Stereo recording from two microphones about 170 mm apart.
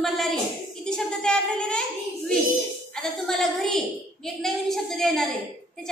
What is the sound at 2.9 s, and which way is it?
A woman's voice, 5° left (ahead or behind).